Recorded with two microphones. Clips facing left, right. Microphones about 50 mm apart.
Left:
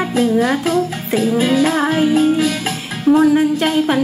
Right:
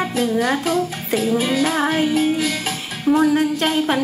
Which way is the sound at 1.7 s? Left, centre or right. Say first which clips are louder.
Left 3 dB; centre.